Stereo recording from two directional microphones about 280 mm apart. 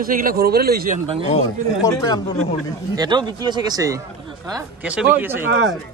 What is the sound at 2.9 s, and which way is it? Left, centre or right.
Speech, centre.